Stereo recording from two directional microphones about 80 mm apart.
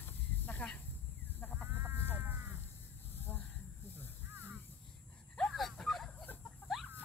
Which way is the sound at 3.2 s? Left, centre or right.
Left.